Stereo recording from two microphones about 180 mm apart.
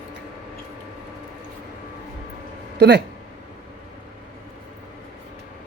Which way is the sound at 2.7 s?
70° right (ahead or behind).